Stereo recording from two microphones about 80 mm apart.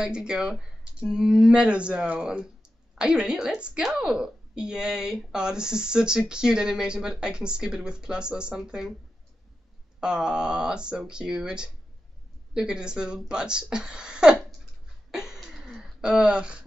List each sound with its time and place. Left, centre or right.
0.0 s a woman's voice: centre
9.9 s a woman's voice: centre
15.0 s a sound: centre